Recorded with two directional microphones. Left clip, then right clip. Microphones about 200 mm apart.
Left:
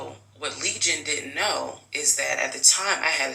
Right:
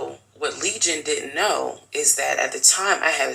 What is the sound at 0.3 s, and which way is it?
A man's voice, 45° right (ahead or behind).